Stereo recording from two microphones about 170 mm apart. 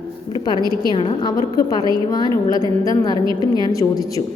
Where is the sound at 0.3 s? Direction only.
25° left (ahead or behind).